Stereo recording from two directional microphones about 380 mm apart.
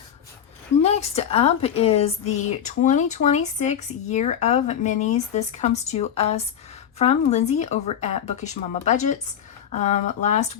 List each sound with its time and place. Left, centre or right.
0.8 s a woman's voice: centre